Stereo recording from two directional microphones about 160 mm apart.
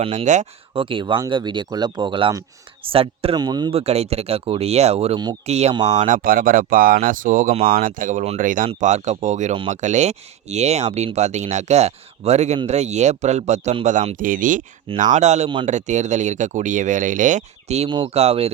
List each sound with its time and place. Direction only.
0.0 s speech: 40° right (ahead or behind)
0.7 s speech: 35° right (ahead or behind)
3.3 s speech: 25° right (ahead or behind)
3.7 s speech: 40° right (ahead or behind)
5.7 s speech: 25° right (ahead or behind)
6.0 s speech: 55° right (ahead or behind)
17.8 s speech: 35° right (ahead or behind)